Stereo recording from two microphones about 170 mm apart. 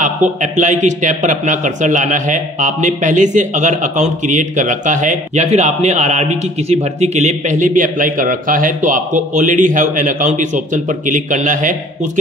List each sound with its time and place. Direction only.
0.0 s a man's voice: 45° right (ahead or behind)